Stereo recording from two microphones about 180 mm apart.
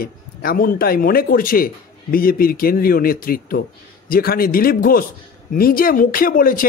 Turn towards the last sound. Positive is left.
turn(degrees=50)  # may be behind; listen again after turning